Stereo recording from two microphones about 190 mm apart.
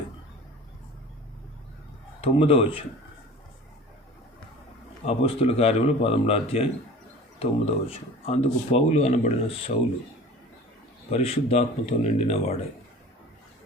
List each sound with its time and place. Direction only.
2.2 s speech: 30° left (ahead or behind)
5.0 s speech: 30° left (ahead or behind)
11.1 s speech: 30° left (ahead or behind)